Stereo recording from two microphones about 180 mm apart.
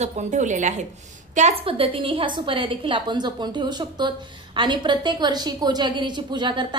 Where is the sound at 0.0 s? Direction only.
40° right (ahead or behind).